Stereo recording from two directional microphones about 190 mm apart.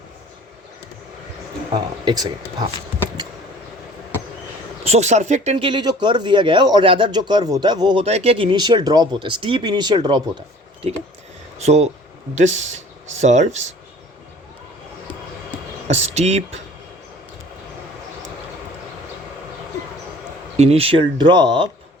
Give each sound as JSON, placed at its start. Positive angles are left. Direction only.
{"t": 2.0, "sound": "speech", "side_deg": -20}
{"t": 4.9, "sound": "speech", "side_deg": -35}
{"t": 8.0, "sound": "speech", "side_deg": -35}
{"t": 15.9, "sound": "speech", "side_deg": -35}
{"t": 20.6, "sound": "speech", "side_deg": -30}